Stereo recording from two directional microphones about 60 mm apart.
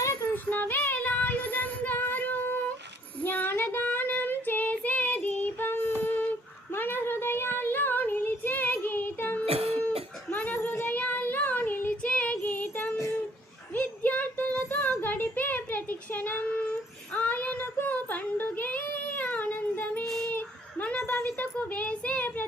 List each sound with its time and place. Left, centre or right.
0.0 s child singing: left
0.3 s child singing: left
10.3 s a sound: left
10.9 s child singing: left
12.0 s child singing: centre
12.5 s child singing: left
13.7 s a sound: left
17.2 s child singing: left
20.1 s female singing: centre
20.3 s a sound: left
21.0 s a sound: left
21.7 s child singing: left